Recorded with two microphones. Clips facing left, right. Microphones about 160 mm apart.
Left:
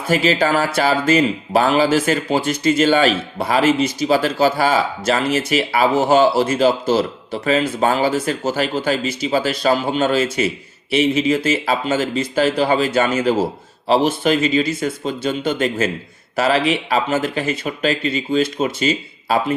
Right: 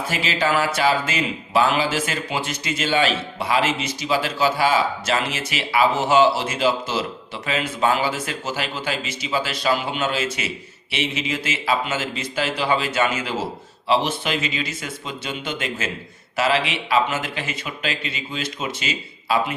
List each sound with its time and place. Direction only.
0.1 s speech: 40° left (ahead or behind)